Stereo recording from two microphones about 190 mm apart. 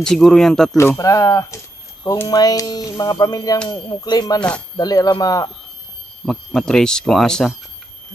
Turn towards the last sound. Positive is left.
turn(degrees=5)  # may be behind; listen again after turning